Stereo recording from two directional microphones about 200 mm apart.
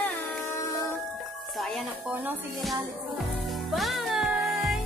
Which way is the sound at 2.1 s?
10° right (ahead or behind).